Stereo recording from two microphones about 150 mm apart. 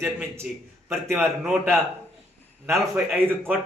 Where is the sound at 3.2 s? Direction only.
15° right (ahead or behind).